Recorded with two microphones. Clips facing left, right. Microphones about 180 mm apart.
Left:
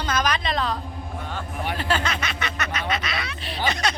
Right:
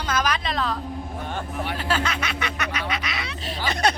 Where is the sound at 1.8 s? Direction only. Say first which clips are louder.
Left 1 dB; 5° right (ahead or behind).